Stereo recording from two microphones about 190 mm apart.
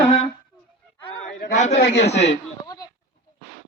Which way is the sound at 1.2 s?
40° left (ahead or behind).